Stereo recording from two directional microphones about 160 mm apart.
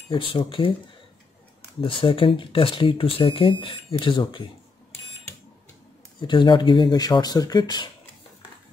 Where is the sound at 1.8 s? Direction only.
35° left (ahead or behind).